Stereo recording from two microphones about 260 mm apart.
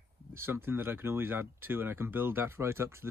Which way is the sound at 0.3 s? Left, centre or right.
Centre.